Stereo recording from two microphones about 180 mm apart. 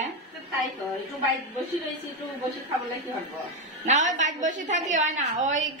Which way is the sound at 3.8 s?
45° right (ahead or behind).